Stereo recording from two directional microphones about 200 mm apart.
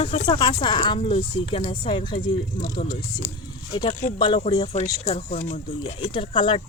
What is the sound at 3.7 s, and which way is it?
Speech, 25° left (ahead or behind).